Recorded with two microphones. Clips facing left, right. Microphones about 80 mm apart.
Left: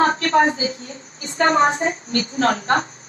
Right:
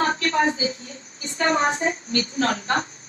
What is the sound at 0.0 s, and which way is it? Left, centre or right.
A woman's voice, left.